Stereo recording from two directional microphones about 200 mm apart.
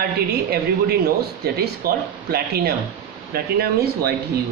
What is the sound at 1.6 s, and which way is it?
Speech, 50° right (ahead or behind).